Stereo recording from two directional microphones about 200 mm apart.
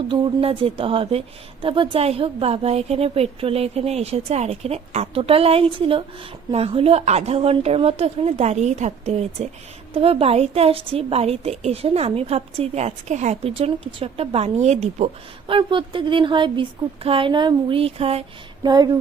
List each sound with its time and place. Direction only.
0.1 s a woman's voice: 25° right (ahead or behind)